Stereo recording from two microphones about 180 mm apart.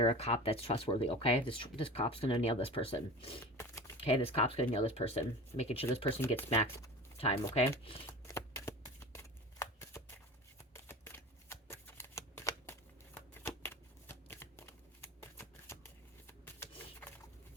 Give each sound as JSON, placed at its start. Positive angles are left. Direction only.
{"t": 0.0, "sound": "speech", "side_deg": 35}
{"t": 3.4, "sound": "a sound", "side_deg": 15}
{"t": 4.0, "sound": "speech", "side_deg": 30}
{"t": 6.1, "sound": "speech", "side_deg": 10}
{"t": 7.2, "sound": "speech", "side_deg": 35}
{"t": 8.3, "sound": "shuffling cards", "side_deg": 15}
{"t": 14.1, "sound": "shuffling cards", "side_deg": 10}